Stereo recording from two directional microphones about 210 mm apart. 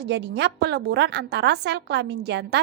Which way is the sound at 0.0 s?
50° right (ahead or behind).